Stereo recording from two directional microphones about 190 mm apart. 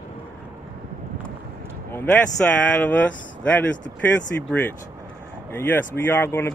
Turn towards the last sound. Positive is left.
turn(degrees=10)  # may be behind; listen again after turning